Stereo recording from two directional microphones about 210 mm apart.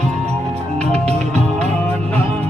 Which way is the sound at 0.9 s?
30° right (ahead or behind).